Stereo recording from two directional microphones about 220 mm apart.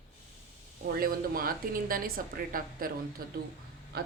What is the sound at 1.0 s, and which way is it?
A man's voice, 40° right (ahead or behind).